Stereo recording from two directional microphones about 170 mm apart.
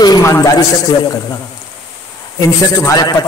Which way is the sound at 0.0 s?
20° left (ahead or behind).